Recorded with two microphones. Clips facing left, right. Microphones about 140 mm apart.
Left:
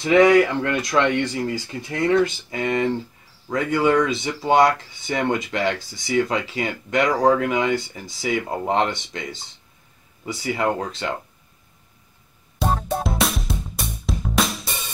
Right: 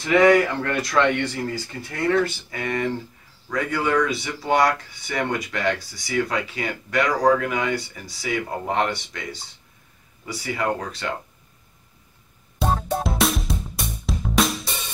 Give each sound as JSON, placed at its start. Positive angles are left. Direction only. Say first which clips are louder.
{"t": 0.6, "sound": "speech", "louder": "left 1 dB", "side_deg": 15}
{"t": 12.5, "sound": "music", "louder": "even", "side_deg": 0}